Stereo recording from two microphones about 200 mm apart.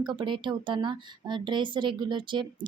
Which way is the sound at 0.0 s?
20° right (ahead or behind).